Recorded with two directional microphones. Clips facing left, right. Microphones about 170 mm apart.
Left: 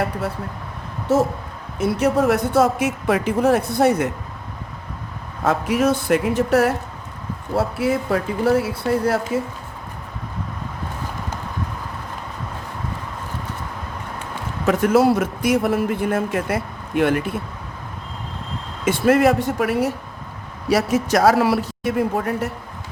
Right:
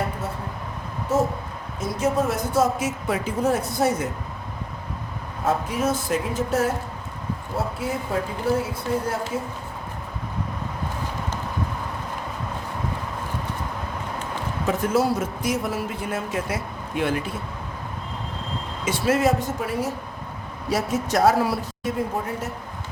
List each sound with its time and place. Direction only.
1.1 s a man's voice: 75° left (ahead or behind)
5.5 s speech: 80° left
14.7 s a man's voice: 70° left (ahead or behind)
18.9 s a man's voice: 55° left (ahead or behind)
20.7 s speech: 90° left; by 22.4 s 75° left (ahead or behind)